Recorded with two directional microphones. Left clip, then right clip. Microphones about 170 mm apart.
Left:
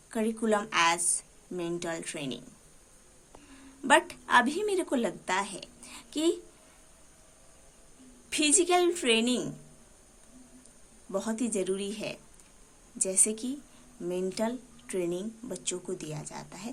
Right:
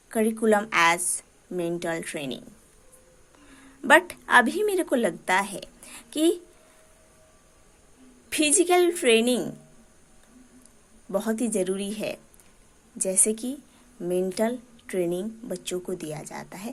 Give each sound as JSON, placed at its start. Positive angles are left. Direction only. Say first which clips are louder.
{"t": 0.1, "sound": "a woman's voice", "louder": "right 6 dB", "side_deg": -30}
{"t": 3.5, "sound": "a woman's voice", "louder": "right 5 dB", "side_deg": -30}
{"t": 8.3, "sound": "speech", "louder": "right 4 dB", "side_deg": -30}
{"t": 11.1, "sound": "speech", "louder": "right 5 dB", "side_deg": -30}